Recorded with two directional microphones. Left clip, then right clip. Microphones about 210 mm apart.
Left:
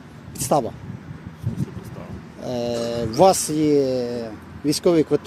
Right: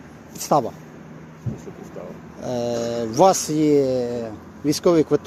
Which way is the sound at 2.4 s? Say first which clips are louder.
Right 1 dB; 10° left (ahead or behind).